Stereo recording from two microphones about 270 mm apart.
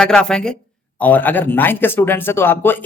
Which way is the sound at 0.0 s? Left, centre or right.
Centre.